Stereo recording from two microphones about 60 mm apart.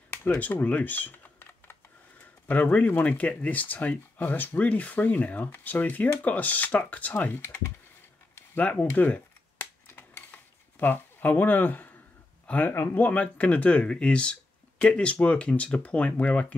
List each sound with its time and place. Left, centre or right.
0.1 s computer keyboard: left
2.4 s speech: left
8.5 s speech: centre
9.8 s a sound: left
12.4 s speech: left
12.7 s speech: left
13.0 s speech: left